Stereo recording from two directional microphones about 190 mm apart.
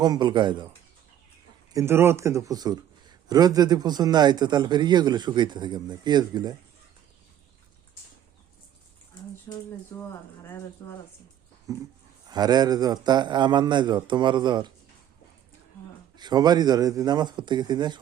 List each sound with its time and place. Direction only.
0.0 s a man's voice: 20° right (ahead or behind)
1.7 s a man's voice: 15° right (ahead or behind)
9.5 s speech: 15° left (ahead or behind)
11.7 s a man's voice: 15° right (ahead or behind)
16.1 s a man's voice: 20° right (ahead or behind)